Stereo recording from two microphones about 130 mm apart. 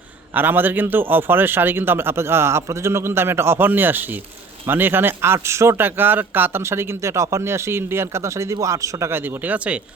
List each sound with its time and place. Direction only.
0.3 s a man's voice: 15° right (ahead or behind)